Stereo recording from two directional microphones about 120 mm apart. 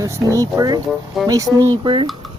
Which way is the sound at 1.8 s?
45° right (ahead or behind).